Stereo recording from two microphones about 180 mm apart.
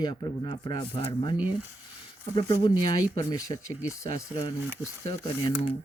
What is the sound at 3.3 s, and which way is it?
Speech, 20° left (ahead or behind).